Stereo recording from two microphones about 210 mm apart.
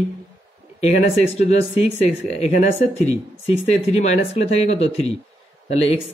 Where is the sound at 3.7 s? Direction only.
30° left (ahead or behind).